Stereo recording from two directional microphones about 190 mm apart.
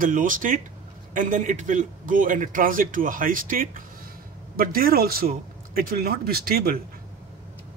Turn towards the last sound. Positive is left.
turn(degrees=-50)  # may be behind; listen again after turning